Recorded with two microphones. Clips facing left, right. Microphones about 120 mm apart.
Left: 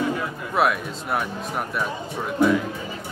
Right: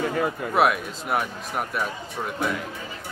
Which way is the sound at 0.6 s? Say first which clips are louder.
Even; centre (ahead or behind).